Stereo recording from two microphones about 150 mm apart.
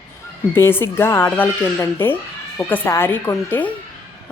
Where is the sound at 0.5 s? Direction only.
15° left (ahead or behind).